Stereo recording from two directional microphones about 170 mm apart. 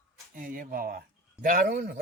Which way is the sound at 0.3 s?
55° right (ahead or behind).